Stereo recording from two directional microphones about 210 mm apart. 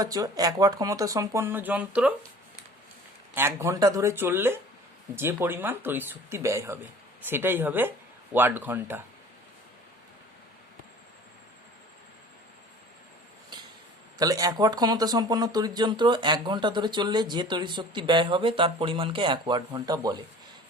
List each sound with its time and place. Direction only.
0.0 s speech: 20° right (ahead or behind)
3.3 s speech: 15° right (ahead or behind)
14.2 s speech: 15° right (ahead or behind)